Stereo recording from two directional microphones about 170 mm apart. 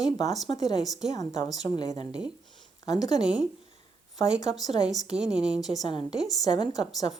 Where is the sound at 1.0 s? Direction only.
40° right (ahead or behind).